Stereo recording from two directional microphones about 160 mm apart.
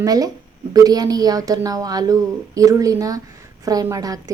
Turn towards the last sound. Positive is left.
turn(degrees=-20)  # may be behind; listen again after turning